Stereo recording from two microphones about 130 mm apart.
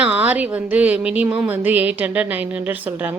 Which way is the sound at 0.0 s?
10° right (ahead or behind).